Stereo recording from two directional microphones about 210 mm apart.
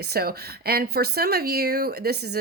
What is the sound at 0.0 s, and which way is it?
Speech, 45° right (ahead or behind).